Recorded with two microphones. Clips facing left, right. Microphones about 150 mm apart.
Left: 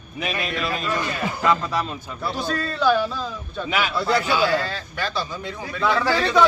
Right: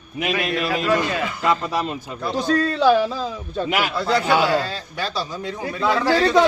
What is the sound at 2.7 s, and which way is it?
Speech, 30° right (ahead or behind).